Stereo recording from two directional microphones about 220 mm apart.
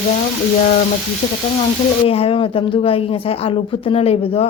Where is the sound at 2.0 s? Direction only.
25° left (ahead or behind).